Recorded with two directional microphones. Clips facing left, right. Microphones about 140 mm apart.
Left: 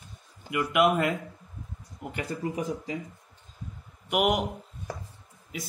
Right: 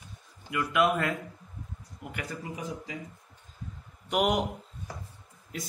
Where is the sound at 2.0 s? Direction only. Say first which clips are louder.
Left 6 dB; 30° left (ahead or behind).